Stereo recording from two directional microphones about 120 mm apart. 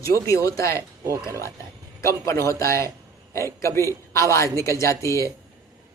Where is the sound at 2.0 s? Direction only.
25° left (ahead or behind).